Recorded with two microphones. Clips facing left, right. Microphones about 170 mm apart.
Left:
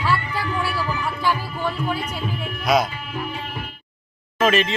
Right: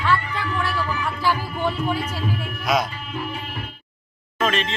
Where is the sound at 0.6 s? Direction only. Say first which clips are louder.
Right 1 dB; 10° left (ahead or behind).